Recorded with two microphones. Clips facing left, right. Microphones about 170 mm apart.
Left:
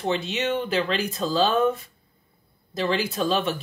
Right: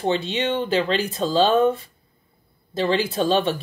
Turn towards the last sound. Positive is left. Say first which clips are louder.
# right 4 dB
turn(degrees=-30)  # may be behind; listen again after turning